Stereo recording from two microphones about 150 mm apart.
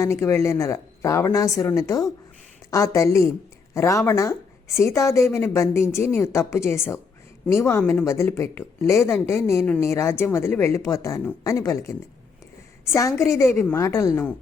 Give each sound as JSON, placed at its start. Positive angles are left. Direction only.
{"t": 0.0, "sound": "a woman's voice", "side_deg": 20}